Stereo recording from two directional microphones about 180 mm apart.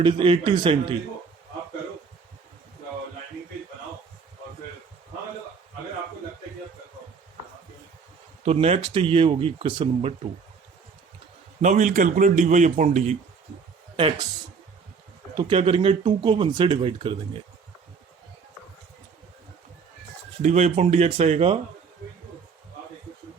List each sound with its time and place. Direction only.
0.0 s speech: 30° right (ahead or behind)
8.4 s speech: 35° right (ahead or behind)
11.6 s a man's voice: 45° right (ahead or behind)
13.9 s speech: 30° right (ahead or behind)
15.4 s speech: 30° right (ahead or behind)
20.4 s speech: 40° right (ahead or behind)